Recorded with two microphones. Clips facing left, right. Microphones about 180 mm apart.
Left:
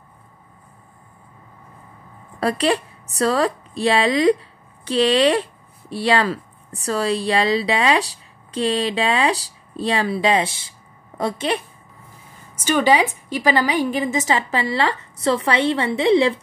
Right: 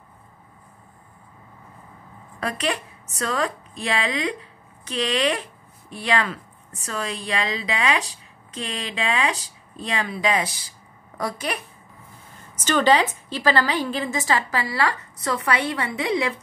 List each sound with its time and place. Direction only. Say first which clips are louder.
2.4 s a woman's voice: left 7 dB; 30° left (ahead or behind)
12.6 s a woman's voice: left 2 dB; 10° left (ahead or behind); by 16.3 s 30° left (ahead or behind)